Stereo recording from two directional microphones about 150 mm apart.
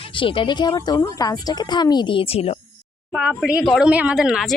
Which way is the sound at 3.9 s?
10° right (ahead or behind).